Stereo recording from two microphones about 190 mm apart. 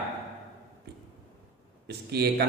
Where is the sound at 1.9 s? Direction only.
60° right (ahead or behind).